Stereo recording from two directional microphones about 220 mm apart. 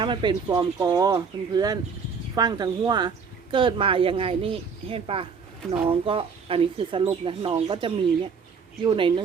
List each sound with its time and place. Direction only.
0.0 s speech: 20° right (ahead or behind)